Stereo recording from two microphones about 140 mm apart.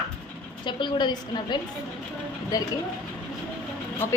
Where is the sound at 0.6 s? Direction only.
35° left (ahead or behind).